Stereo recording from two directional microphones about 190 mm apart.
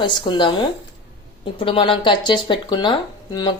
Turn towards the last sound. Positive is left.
turn(degrees=20)  # may be behind; listen again after turning